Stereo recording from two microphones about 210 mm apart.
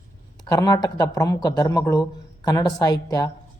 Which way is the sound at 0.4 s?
15° left (ahead or behind).